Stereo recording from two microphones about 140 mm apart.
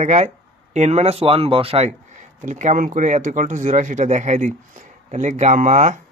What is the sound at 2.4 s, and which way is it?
Speech, 60° right (ahead or behind).